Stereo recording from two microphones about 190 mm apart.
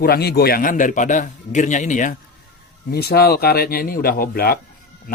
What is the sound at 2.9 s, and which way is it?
Speech, 55° left (ahead or behind).